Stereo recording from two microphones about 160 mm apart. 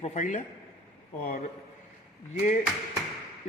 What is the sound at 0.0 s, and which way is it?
Speech, 45° left (ahead or behind).